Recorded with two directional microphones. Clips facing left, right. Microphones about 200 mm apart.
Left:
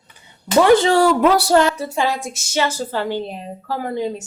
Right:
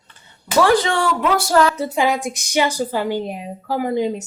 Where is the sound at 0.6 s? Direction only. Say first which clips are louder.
Left 3 dB; 20° left (ahead or behind).